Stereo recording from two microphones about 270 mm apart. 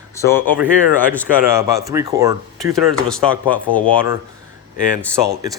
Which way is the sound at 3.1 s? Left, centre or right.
Centre.